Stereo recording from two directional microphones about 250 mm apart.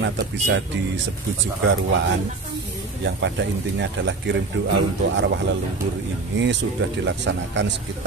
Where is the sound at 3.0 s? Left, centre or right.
Right.